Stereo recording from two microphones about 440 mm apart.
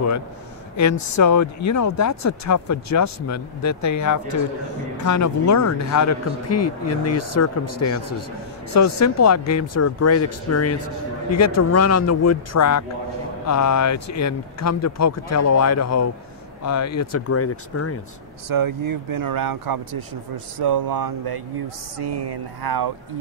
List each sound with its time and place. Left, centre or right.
0.7 s speech: left
18.5 s speech: right